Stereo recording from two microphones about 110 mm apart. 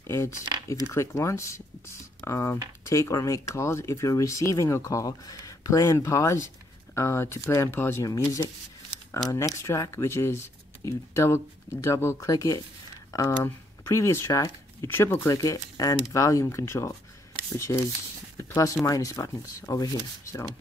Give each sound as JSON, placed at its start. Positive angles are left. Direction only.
{"t": 0.0, "sound": "speech", "side_deg": 25}
{"t": 9.7, "sound": "speech", "side_deg": 25}
{"t": 15.2, "sound": "speech", "side_deg": 30}
{"t": 18.4, "sound": "a sound", "side_deg": 30}
{"t": 18.9, "sound": "speech", "side_deg": 30}